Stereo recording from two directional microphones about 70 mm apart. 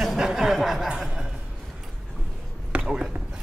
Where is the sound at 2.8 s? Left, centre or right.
Centre.